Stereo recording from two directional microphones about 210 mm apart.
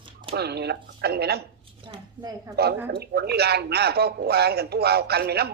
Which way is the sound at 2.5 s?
50° right (ahead or behind).